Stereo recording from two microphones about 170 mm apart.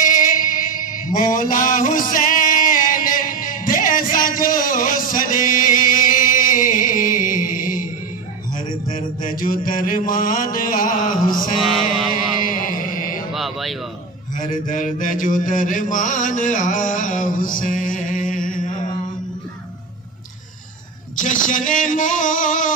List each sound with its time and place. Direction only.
0.0 s mantra: 55° left (ahead or behind)
8.9 s mantra: 55° left (ahead or behind)
11.5 s mantra: centre (ahead or behind)
12.4 s a sound: 55° left (ahead or behind)
13.3 s a sound: centre (ahead or behind)
14.4 s mantra: 50° left (ahead or behind)
21.2 s speech: 50° left (ahead or behind)